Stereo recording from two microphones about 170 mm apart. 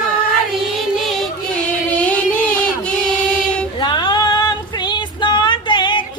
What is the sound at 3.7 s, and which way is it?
Female singing, 25° left (ahead or behind).